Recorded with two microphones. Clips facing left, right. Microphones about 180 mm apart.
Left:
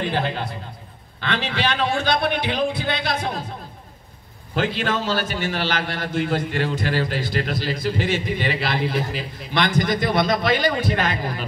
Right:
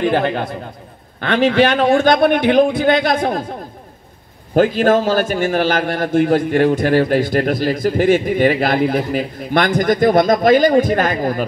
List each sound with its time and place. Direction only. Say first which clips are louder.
0.0 s a man's voice: right 8 dB; 50° right (ahead or behind)
4.6 s a man's voice: right 10 dB; 45° right (ahead or behind)